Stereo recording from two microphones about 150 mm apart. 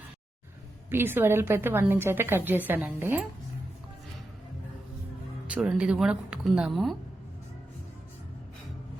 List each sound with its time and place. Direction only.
0.9 s a woman's voice: 15° right (ahead or behind)
5.5 s speech: 5° right (ahead or behind)